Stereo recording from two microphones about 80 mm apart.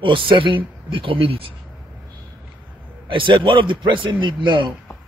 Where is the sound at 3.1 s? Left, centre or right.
Right.